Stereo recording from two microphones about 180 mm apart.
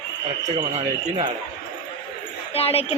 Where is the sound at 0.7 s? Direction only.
30° right (ahead or behind).